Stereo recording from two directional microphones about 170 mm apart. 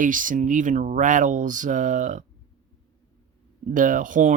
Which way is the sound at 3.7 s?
50° right (ahead or behind).